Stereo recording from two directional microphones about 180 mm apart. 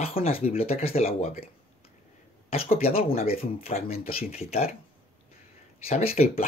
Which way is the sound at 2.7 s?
35° left (ahead or behind).